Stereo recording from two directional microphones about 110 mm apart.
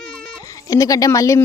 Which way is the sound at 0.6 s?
30° left (ahead or behind).